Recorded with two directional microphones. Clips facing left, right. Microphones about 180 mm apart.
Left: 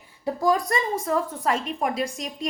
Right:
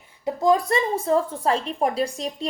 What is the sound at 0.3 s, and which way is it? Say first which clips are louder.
Speech: right 3 dB; 20° right (ahead or behind).